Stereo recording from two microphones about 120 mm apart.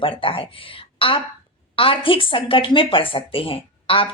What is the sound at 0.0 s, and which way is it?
Speech, 50° left (ahead or behind).